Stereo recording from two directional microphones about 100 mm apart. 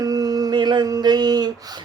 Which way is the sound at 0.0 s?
40° right (ahead or behind).